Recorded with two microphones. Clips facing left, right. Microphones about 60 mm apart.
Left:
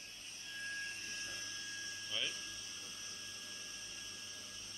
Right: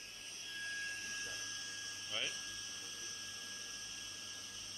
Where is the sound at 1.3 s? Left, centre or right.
Centre.